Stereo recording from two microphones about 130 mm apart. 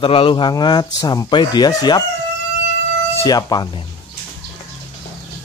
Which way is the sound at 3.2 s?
30° left (ahead or behind).